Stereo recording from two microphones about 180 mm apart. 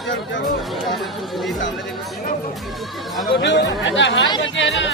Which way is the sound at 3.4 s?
85° left.